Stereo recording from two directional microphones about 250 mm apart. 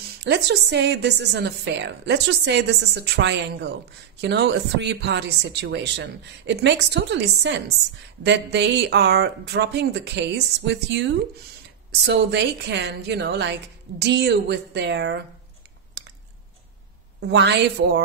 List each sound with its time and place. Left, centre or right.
0.2 s a woman's voice: right
16.0 s a sound: right
17.3 s a woman's voice: right